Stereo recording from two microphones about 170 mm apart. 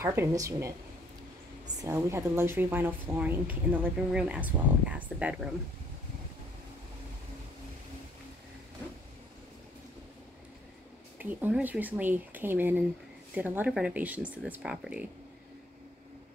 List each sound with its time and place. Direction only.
0.0 s a woman's voice: 15° right (ahead or behind)
1.8 s a woman's voice: 15° right (ahead or behind)
11.1 s a woman's voice: 10° right (ahead or behind)